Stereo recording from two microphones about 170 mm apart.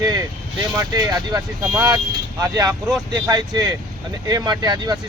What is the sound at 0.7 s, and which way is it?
Speech, 20° right (ahead or behind).